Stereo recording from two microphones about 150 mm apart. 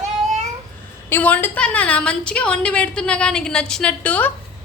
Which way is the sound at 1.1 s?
10° left (ahead or behind).